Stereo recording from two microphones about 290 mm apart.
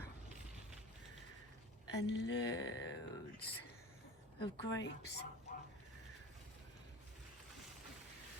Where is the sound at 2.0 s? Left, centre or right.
Left.